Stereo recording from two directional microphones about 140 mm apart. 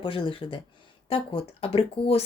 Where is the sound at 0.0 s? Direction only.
40° left (ahead or behind).